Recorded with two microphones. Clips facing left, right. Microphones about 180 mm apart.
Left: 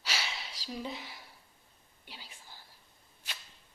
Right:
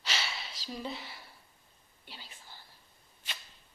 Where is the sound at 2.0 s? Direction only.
10° left (ahead or behind).